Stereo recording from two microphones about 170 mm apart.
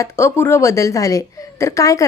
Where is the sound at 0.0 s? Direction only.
15° left (ahead or behind).